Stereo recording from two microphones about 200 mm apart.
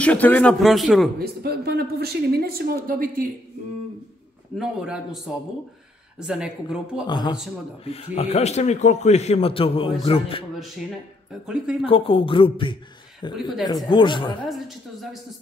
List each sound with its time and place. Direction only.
0.0 s a man's voice: 5° left (ahead or behind)
1.2 s speech: 50° right (ahead or behind)
4.6 s a man's voice: 5° right (ahead or behind)
7.1 s speech: 20° left (ahead or behind)
11.4 s a man's voice: 5° right (ahead or behind)
11.8 s speech: 25° left (ahead or behind)